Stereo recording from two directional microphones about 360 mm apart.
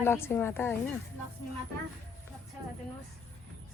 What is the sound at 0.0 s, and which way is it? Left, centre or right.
Speech, centre.